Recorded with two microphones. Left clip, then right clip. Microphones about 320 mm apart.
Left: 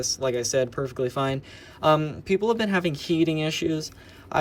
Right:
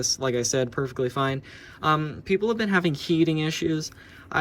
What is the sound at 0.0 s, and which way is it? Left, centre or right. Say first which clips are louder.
Speech: even; centre.